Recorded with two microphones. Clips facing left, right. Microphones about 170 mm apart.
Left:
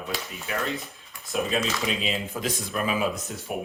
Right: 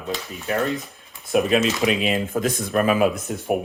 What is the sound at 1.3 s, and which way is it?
A man's voice, 65° right (ahead or behind).